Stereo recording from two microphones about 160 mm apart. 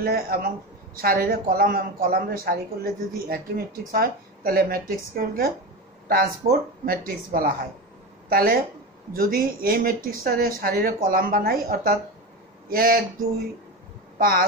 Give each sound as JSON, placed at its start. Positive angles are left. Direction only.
{"t": 0.0, "sound": "speech", "side_deg": -65}
{"t": 6.9, "sound": "speech", "side_deg": -60}
{"t": 14.1, "sound": "speech", "side_deg": -65}